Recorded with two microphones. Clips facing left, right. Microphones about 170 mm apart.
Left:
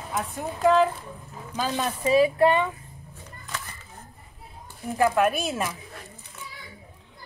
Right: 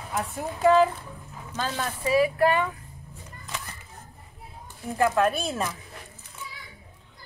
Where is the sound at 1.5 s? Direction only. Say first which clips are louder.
Left 3 dB; 15° left (ahead or behind).